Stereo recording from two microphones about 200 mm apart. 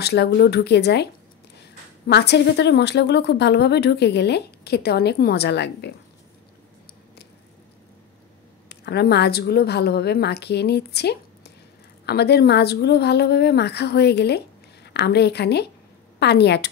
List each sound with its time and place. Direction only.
0.0 s a woman's voice: 55° left (ahead or behind)
2.0 s a woman's voice: 60° left (ahead or behind)
8.6 s a woman's voice: 55° left (ahead or behind)